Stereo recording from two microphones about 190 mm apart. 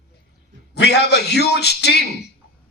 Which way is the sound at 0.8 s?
60° left (ahead or behind).